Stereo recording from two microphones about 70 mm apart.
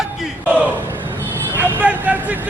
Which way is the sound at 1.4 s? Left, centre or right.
Right.